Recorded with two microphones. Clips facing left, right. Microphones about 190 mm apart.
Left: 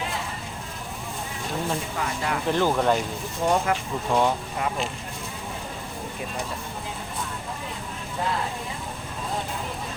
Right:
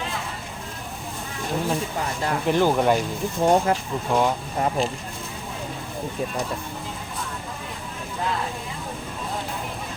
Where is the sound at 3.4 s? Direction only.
30° right (ahead or behind).